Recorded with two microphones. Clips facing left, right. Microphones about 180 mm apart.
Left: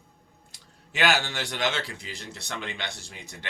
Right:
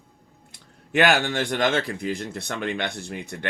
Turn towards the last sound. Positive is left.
turn(degrees=-55)  # may be behind; listen again after turning